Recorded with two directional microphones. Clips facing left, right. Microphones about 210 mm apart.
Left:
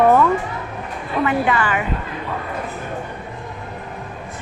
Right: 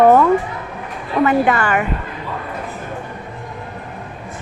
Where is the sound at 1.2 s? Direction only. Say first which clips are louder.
Right 4 dB; 45° right (ahead or behind).